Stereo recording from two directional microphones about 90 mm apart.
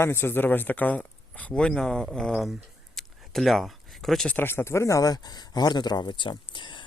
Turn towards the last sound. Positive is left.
turn(degrees=60)  # may be behind; listen again after turning